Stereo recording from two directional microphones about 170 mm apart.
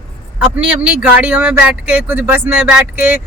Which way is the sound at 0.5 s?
5° right (ahead or behind).